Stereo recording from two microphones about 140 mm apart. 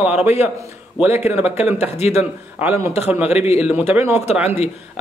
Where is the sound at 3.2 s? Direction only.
50° left (ahead or behind).